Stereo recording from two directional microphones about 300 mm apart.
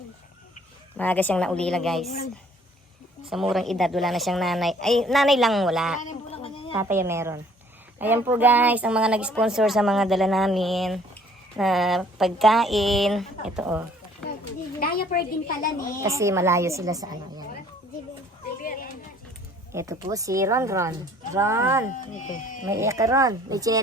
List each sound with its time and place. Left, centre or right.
0.9 s speech: centre
3.2 s speech: centre
6.0 s a sound: left
6.7 s a woman's voice: centre
14.8 s speech: left
16.0 s a woman's voice: centre
18.6 s a sound: left
19.7 s a woman's voice: centre
21.9 s speech: left
22.7 s a woman's voice: centre